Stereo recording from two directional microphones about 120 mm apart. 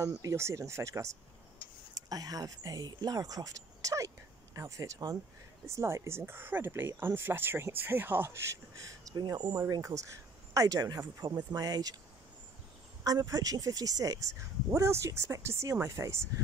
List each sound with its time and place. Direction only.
0.0 s speech: 25° right (ahead or behind)
13.0 s speech: 30° right (ahead or behind)